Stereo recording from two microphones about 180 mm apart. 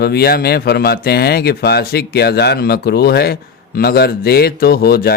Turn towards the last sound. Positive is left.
turn(degrees=60)  # may be behind; listen again after turning